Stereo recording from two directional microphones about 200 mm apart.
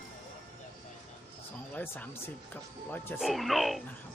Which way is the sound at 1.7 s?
10° left (ahead or behind).